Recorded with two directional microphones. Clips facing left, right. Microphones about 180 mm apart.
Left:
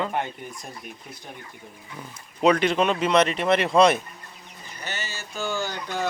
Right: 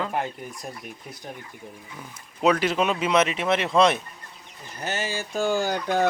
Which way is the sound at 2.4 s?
5° right (ahead or behind).